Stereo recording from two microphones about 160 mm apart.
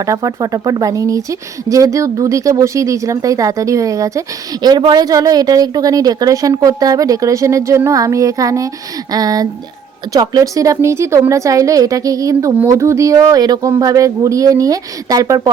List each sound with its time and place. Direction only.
0.0 s a woman's voice: 20° right (ahead or behind)